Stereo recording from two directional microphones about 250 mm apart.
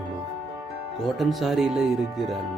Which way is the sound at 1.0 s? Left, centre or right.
Centre.